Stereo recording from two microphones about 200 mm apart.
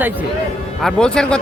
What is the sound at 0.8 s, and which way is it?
Speech, 5° left (ahead or behind).